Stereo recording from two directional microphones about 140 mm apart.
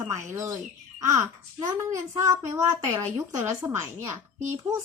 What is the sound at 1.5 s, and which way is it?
A woman's voice, 25° right (ahead or behind).